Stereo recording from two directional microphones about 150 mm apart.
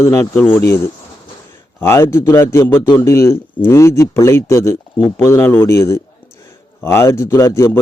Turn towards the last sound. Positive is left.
turn(degrees=15)  # may be behind; listen again after turning